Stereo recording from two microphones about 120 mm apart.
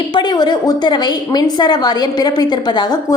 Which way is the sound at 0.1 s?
40° left (ahead or behind).